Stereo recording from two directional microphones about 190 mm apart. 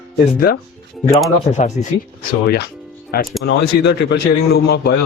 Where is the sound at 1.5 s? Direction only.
40° left (ahead or behind).